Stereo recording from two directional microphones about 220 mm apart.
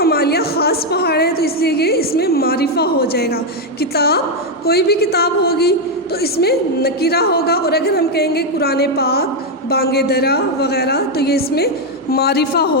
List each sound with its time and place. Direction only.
0.0 s a woman's voice: 45° left (ahead or behind)